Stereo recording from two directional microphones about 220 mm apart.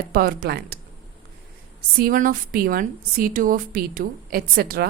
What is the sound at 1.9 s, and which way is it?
A woman's voice, 40° right (ahead or behind).